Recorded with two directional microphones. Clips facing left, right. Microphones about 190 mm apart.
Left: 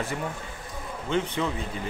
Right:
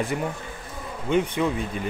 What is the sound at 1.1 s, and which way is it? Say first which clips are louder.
Speech: right 5 dB; 15° right (ahead or behind).